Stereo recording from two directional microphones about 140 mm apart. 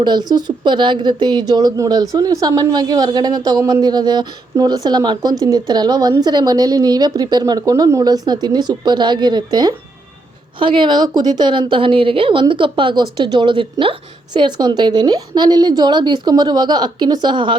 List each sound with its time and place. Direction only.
0.0 s a woman's voice: 30° right (ahead or behind)